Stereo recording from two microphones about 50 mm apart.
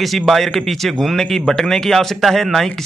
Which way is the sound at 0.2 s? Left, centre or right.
Centre.